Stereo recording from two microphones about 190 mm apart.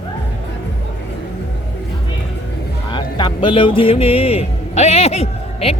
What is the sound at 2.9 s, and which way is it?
A woman's voice, 25° left (ahead or behind).